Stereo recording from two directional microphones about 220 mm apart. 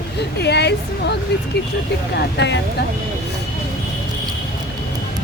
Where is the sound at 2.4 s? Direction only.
50° left (ahead or behind).